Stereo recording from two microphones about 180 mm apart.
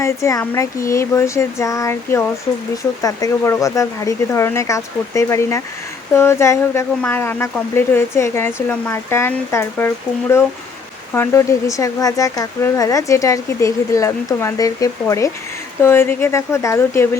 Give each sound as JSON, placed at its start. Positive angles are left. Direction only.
{"t": 0.0, "sound": "speech", "side_deg": 15}